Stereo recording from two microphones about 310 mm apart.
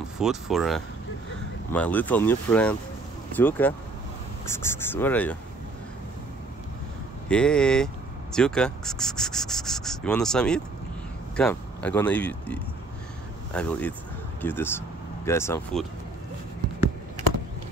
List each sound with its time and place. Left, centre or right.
0.2 s speech: centre
7.2 s speech: centre